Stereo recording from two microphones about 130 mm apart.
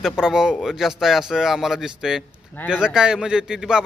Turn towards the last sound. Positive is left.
turn(degrees=-5)  # may be behind; listen again after turning